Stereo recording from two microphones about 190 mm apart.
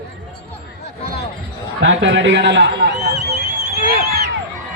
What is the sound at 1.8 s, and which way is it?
Speech, 80° right.